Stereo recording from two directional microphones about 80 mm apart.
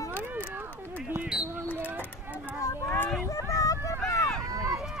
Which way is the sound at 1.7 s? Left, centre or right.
Right.